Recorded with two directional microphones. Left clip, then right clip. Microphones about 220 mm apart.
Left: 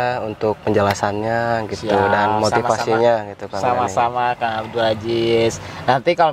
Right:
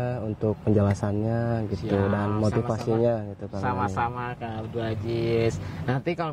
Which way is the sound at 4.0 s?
40° right (ahead or behind).